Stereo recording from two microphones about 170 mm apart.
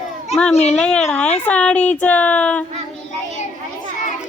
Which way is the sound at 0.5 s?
40° left (ahead or behind).